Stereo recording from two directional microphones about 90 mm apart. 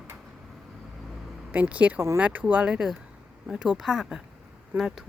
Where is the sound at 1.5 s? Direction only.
15° right (ahead or behind).